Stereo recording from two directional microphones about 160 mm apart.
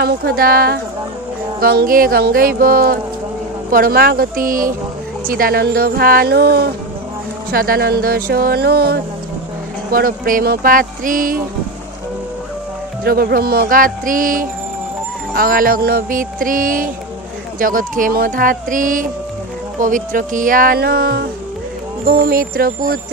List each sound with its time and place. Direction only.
0.0 s speech: 80° right
1.6 s music: 75° right (ahead or behind)
5.3 s speech: 70° right (ahead or behind); by 6.7 s 90° right
7.5 s speech: 70° right (ahead or behind); by 9.0 s 85° right
9.8 s music: 65° right (ahead or behind)
13.0 s music: 70° right (ahead or behind)
22.0 s music: 65° right (ahead or behind)